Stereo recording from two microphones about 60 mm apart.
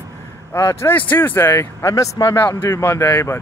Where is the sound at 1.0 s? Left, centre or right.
Left.